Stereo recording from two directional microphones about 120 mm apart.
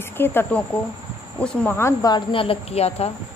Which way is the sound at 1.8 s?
25° left (ahead or behind).